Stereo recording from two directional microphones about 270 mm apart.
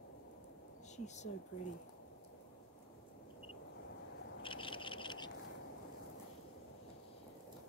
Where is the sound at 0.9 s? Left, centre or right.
Left.